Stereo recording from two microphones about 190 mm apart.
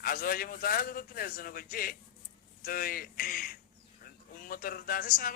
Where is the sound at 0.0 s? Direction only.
50° left (ahead or behind).